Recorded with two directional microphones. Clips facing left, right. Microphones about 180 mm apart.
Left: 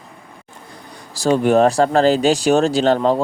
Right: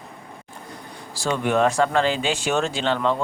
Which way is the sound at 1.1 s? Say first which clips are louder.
Left 8 dB; 40° left (ahead or behind).